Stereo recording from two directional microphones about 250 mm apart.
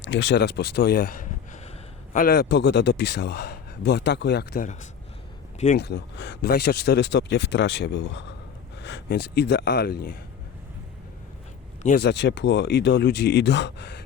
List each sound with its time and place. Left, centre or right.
0.0 s speech: left
5.7 s speech: left
11.8 s speech: left